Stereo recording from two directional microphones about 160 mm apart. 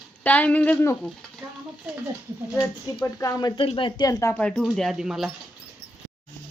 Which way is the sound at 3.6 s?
35° left (ahead or behind).